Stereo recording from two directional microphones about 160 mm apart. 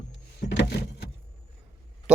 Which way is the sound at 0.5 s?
90° left.